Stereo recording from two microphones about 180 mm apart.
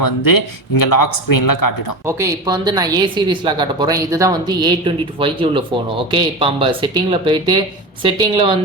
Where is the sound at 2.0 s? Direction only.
15° right (ahead or behind).